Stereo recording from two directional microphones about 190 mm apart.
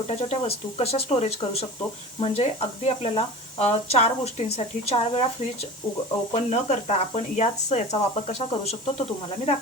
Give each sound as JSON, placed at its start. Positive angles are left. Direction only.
{"t": 0.1, "sound": "speech", "side_deg": 35}
{"t": 6.3, "sound": "speech", "side_deg": 35}